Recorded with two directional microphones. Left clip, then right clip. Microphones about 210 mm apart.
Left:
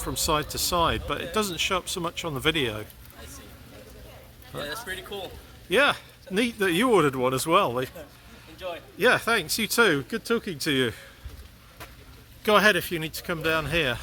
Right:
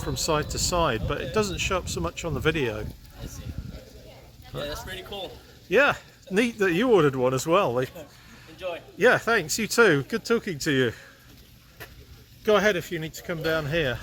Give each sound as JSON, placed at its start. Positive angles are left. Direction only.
{"t": 0.0, "sound": "speech", "side_deg": 10}
{"t": 4.5, "sound": "speech", "side_deg": 10}
{"t": 6.3, "sound": "speech", "side_deg": -10}
{"t": 6.7, "sound": "speech", "side_deg": 10}
{"t": 8.5, "sound": "speech", "side_deg": -20}
{"t": 9.0, "sound": "speech", "side_deg": 0}
{"t": 12.4, "sound": "speech", "side_deg": 20}